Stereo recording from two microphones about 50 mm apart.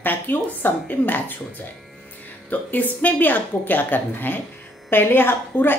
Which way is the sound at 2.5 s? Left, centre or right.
Left.